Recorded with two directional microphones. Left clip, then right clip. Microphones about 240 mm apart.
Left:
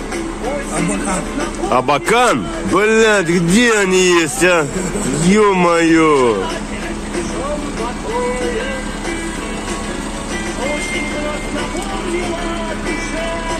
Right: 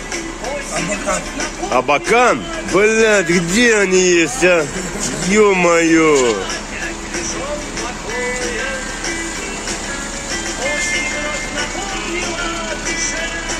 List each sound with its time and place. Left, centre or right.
1.7 s a man's voice: centre